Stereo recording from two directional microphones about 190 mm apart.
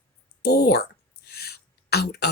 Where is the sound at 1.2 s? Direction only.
55° left (ahead or behind).